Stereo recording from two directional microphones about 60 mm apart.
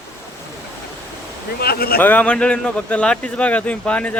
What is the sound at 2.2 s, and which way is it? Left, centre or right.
Speech, centre.